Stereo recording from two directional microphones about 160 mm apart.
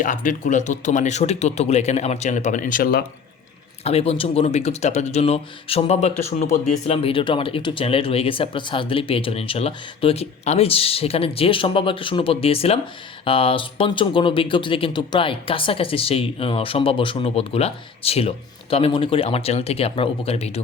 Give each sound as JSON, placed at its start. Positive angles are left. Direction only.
{"t": 0.0, "sound": "speech", "side_deg": 55}
{"t": 3.8, "sound": "speech", "side_deg": 40}